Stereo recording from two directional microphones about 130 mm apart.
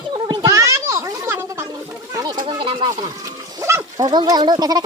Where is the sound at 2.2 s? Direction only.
35° right (ahead or behind).